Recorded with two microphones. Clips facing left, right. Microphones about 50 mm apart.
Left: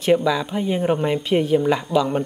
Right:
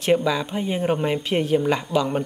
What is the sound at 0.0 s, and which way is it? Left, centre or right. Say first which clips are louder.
Speech: left 2 dB; centre.